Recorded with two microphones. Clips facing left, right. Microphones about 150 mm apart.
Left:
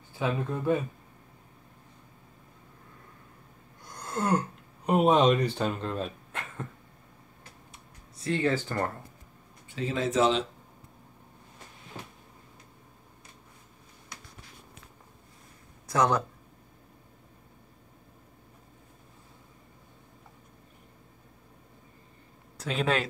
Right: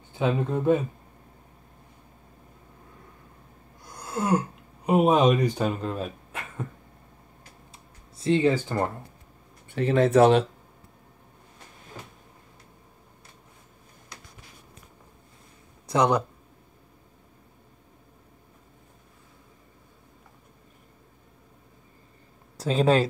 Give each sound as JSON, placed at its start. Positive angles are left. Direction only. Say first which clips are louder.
{"t": 0.1, "sound": "speech", "louder": "right 5 dB", "side_deg": -20}
{"t": 3.8, "sound": "a sound", "louder": "right 2 dB", "side_deg": -10}
{"t": 4.8, "sound": "speech", "louder": "right 2 dB", "side_deg": -10}
{"t": 7.7, "sound": "a sound", "louder": "right 1 dB", "side_deg": -25}
{"t": 9.7, "sound": "speech", "louder": "right 8 dB", "side_deg": -60}
{"t": 15.9, "sound": "speech", "louder": "right 3 dB", "side_deg": -15}
{"t": 22.6, "sound": "speech", "louder": "right 7 dB", "side_deg": -35}